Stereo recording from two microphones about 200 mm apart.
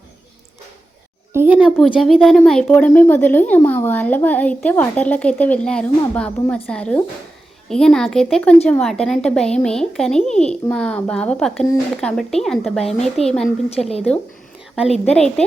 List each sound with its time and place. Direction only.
1.3 s a child's voice: 10° right (ahead or behind)
13.2 s speech: 30° left (ahead or behind)
15.0 s speech: 5° left (ahead or behind)